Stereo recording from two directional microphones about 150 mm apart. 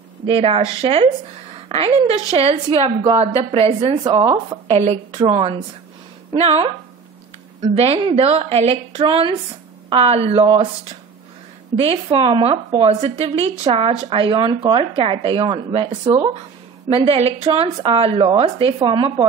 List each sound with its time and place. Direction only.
0.3 s a woman's voice: 40° right (ahead or behind)
4.0 s speech: 30° right (ahead or behind)
4.6 s a woman's voice: 45° right (ahead or behind)
7.7 s a woman's voice: 40° right (ahead or behind)
11.7 s a woman's voice: 40° right (ahead or behind)